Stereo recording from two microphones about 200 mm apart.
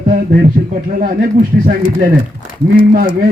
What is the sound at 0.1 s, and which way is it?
Speech, 45° right (ahead or behind).